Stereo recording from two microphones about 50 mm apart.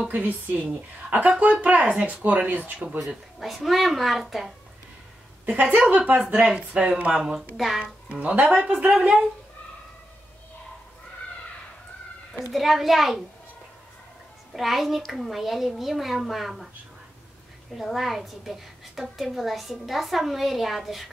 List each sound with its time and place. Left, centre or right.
0.1 s speech: right
3.3 s a woman's voice: centre
5.6 s speech: right
6.4 s speech: right
7.3 s a woman's voice: centre
7.8 s speech: right
8.9 s a woman's voice: centre
12.5 s a woman's voice: centre
14.5 s a woman's voice: centre
17.7 s a woman's voice: centre